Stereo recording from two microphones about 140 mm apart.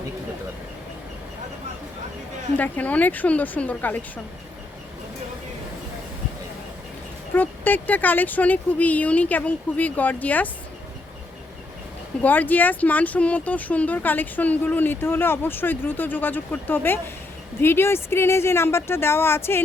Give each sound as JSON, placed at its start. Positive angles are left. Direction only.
{"t": 2.6, "sound": "speech", "side_deg": 10}
{"t": 7.3, "sound": "speech", "side_deg": 15}
{"t": 12.2, "sound": "speech", "side_deg": 10}